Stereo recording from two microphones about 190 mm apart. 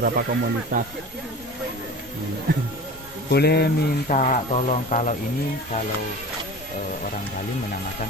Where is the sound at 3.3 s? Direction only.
60° left (ahead or behind).